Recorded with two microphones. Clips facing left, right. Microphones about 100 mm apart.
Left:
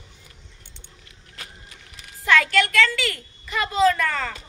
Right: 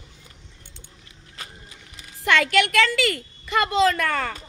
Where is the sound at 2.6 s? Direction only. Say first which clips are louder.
Right 2 dB; 60° right (ahead or behind).